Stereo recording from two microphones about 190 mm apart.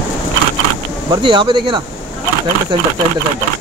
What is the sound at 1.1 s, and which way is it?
Speech, 25° right (ahead or behind).